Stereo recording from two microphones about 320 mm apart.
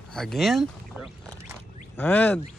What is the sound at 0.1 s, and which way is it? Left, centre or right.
Speech, centre.